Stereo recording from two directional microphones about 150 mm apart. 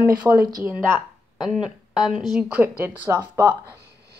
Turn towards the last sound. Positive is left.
turn(degrees=-20)  # may be behind; listen again after turning